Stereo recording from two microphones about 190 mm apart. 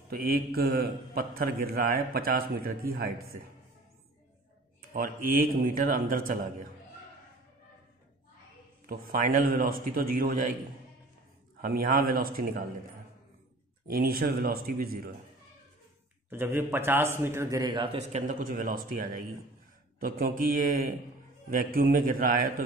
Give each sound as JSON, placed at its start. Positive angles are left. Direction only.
{"t": 0.1, "sound": "a man's voice", "side_deg": -50}
{"t": 4.9, "sound": "a man's voice", "side_deg": -50}
{"t": 8.8, "sound": "a man's voice", "side_deg": -50}
{"t": 11.6, "sound": "a man's voice", "side_deg": -50}
{"t": 13.8, "sound": "a man's voice", "side_deg": -55}
{"t": 16.3, "sound": "a man's voice", "side_deg": -10}
{"t": 17.9, "sound": "a man's voice", "side_deg": -40}